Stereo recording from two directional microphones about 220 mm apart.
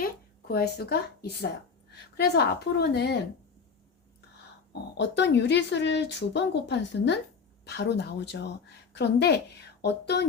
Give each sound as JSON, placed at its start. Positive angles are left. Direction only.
{"t": 0.0, "sound": "speech", "side_deg": 45}
{"t": 4.7, "sound": "speech", "side_deg": 50}